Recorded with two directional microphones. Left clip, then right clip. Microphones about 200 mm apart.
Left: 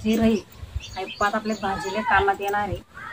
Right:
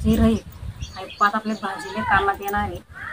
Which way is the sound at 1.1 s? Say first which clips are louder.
Right 4 dB; centre (ahead or behind).